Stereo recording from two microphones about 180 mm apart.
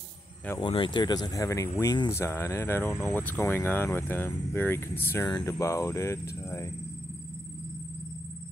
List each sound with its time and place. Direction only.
0.6 s speech: 25° left (ahead or behind)